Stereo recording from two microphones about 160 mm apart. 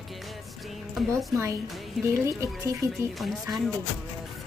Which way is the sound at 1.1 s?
15° right (ahead or behind).